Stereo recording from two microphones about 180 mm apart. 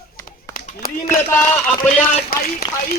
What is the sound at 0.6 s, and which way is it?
Clapping, 55° left (ahead or behind).